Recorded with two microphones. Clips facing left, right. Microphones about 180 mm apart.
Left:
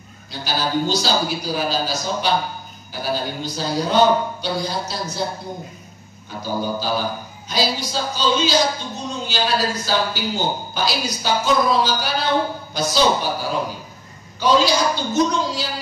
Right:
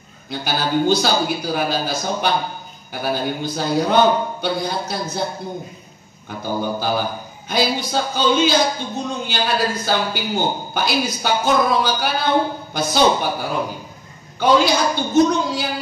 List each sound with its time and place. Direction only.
0.3 s a man's voice: 55° right (ahead or behind)
6.4 s a man's voice: 55° right (ahead or behind)